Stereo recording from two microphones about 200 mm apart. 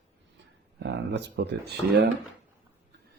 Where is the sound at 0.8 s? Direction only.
60° right (ahead or behind).